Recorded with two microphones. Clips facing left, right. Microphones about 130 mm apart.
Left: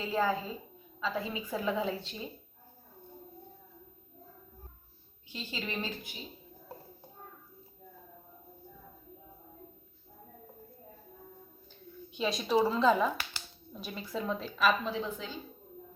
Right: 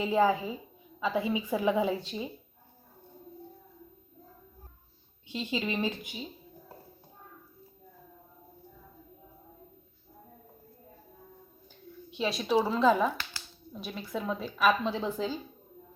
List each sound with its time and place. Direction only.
0.0 s a woman's voice: 20° right (ahead or behind)
5.3 s a woman's voice: 20° right (ahead or behind)
12.1 s speech: centre (ahead or behind)
14.8 s a woman's voice: 35° right (ahead or behind)